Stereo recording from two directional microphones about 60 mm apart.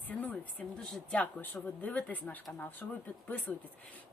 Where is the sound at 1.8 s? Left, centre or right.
Left.